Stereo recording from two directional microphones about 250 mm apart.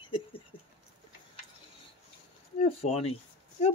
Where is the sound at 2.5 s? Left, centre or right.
Left.